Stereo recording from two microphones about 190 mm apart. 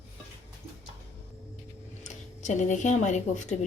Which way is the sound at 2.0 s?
40° left (ahead or behind).